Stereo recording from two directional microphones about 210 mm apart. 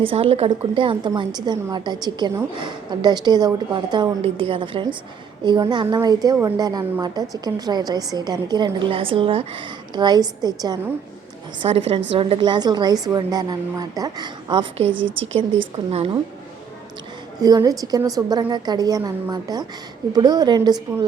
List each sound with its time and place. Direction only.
0.0 s a woman's voice: 25° right (ahead or behind)
11.7 s a woman's voice: 30° right (ahead or behind)
14.8 s a woman's voice: 65° right (ahead or behind)
15.9 s a woman's voice: 30° right (ahead or behind)
17.4 s a woman's voice: 20° right (ahead or behind)